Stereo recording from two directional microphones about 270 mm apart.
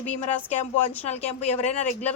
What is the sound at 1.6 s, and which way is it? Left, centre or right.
Speech, left.